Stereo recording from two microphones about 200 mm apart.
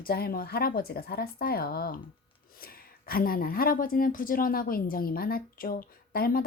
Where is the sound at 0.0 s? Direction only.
50° left (ahead or behind).